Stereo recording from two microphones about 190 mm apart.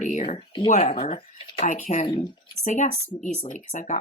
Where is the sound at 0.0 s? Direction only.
40° left (ahead or behind).